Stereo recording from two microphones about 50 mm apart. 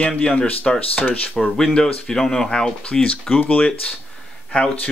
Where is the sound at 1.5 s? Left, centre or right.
Centre.